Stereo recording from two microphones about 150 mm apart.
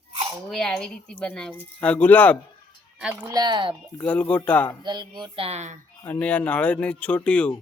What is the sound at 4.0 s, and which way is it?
Speech, 10° left (ahead or behind).